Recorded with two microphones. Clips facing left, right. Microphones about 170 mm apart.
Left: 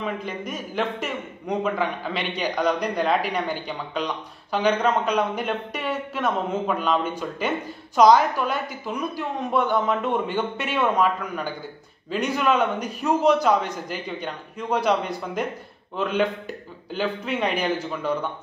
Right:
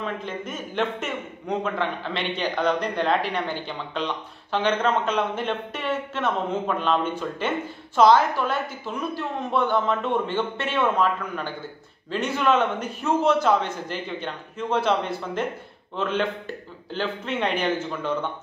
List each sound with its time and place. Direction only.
0.0 s a man's voice: 10° left (ahead or behind)